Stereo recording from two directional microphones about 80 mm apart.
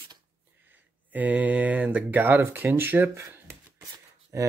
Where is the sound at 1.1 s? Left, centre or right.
Centre.